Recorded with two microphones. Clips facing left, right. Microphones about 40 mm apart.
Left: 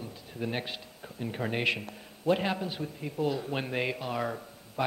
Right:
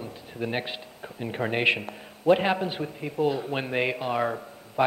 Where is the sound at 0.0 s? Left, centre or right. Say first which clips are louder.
Right 4 dB; right.